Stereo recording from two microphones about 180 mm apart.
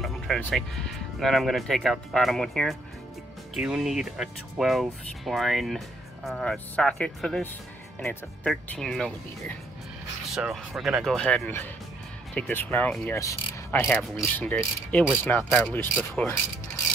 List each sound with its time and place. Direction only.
0.0 s speech: 5° left (ahead or behind)
8.5 s speech: 5° left (ahead or behind)
10.3 s speech: 5° right (ahead or behind)
12.4 s pulleys: 10° left (ahead or behind)
13.2 s mechanisms: 20° left (ahead or behind)
13.7 s pulleys: 5° left (ahead or behind)